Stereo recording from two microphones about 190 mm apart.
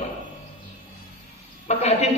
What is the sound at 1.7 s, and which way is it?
Speech, 35° left (ahead or behind).